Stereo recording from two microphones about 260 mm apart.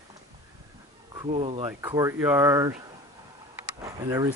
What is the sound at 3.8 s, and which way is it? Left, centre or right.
Speech, centre.